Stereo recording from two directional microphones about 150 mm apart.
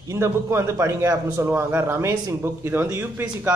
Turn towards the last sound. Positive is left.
turn(degrees=-15)  # may be behind; listen again after turning